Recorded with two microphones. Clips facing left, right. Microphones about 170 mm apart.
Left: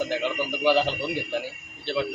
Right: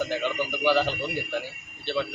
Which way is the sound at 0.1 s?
15° left (ahead or behind).